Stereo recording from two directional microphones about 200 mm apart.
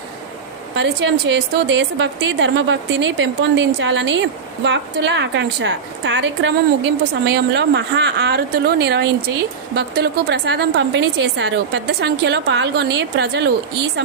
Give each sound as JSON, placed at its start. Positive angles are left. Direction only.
{"t": 0.8, "sound": "a woman's voice", "side_deg": -60}